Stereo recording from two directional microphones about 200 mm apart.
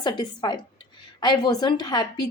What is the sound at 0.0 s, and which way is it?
Speech, 20° left (ahead or behind).